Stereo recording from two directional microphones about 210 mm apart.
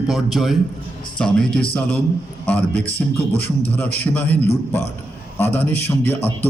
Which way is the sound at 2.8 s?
25° left (ahead or behind).